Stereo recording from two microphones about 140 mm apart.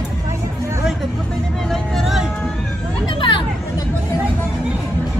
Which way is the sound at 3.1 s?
35° left (ahead or behind).